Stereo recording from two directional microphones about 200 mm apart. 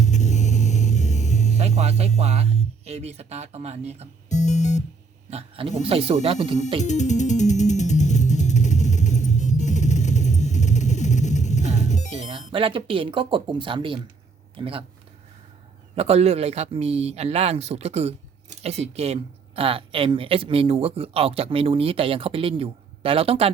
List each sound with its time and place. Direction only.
0.0 s music: 35° left (ahead or behind)
1.5 s speech: 30° right (ahead or behind)
4.3 s music: 35° left (ahead or behind)
5.3 s speech: 30° right (ahead or behind)
6.8 s music: 35° left (ahead or behind)
12.1 s speech: 30° right (ahead or behind)
16.0 s speech: 30° right (ahead or behind)